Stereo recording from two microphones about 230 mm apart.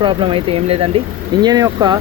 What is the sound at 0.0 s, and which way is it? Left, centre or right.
Speech, right.